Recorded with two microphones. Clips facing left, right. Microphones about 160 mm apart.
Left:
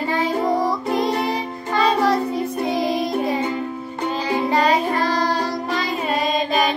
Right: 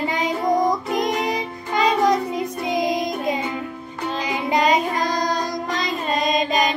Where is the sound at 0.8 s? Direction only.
30° left (ahead or behind).